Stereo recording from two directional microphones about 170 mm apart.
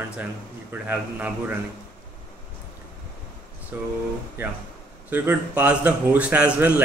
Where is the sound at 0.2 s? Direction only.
10° right (ahead or behind).